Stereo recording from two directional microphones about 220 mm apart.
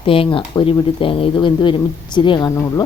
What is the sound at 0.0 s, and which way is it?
Speech, 25° left (ahead or behind).